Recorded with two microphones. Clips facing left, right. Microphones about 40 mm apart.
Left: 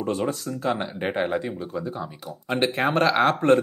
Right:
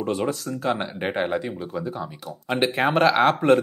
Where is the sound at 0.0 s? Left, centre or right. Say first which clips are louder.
Right 1 dB; centre.